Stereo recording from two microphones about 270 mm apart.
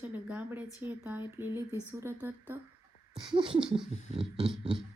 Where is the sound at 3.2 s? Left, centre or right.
Centre.